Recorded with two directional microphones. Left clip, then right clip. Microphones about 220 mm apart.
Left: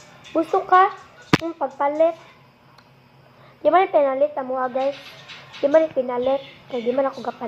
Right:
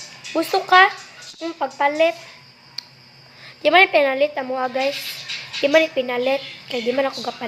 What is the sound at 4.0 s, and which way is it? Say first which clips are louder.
Speech: right 1 dB; 55° right (ahead or behind).